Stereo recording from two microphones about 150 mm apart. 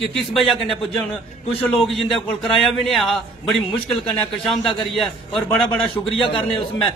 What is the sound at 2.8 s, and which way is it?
A man's voice, centre (ahead or behind).